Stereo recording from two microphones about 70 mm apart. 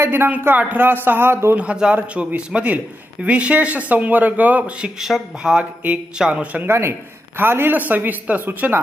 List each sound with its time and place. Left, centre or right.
0.0 s speech: right
1.5 s a man's voice: centre
4.9 s a man's voice: centre
6.7 s a man's voice: right